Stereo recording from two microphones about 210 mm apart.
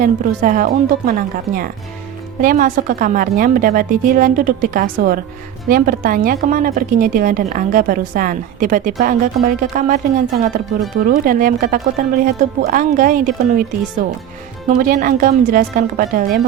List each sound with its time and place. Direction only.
0.0 s a woman's voice: 40° right (ahead or behind)
14.8 s a woman's voice: 40° right (ahead or behind)